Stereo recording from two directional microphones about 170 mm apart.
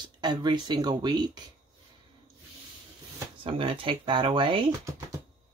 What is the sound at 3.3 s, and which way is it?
Speech, 30° right (ahead or behind).